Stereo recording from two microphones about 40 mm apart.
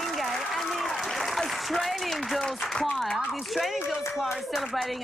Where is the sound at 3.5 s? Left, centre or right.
Centre.